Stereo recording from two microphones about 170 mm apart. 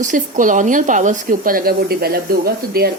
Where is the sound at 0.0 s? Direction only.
50° right (ahead or behind).